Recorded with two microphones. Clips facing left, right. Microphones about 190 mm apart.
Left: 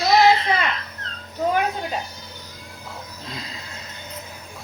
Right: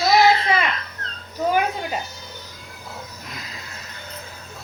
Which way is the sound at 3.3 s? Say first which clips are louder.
Left 3 dB; 25° left (ahead or behind).